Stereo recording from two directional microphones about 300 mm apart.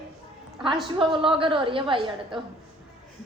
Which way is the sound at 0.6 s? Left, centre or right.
Centre.